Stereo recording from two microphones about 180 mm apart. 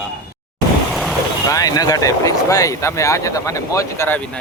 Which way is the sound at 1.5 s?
20° left (ahead or behind).